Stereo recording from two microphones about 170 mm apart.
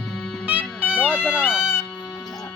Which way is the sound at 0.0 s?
5° left (ahead or behind).